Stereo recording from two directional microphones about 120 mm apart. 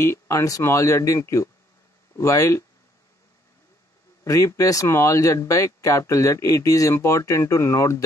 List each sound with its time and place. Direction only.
0.0 s speech: 25° left (ahead or behind)
4.2 s speech: 25° left (ahead or behind)